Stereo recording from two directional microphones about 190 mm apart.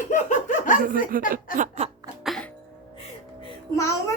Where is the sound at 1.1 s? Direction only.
45° right (ahead or behind).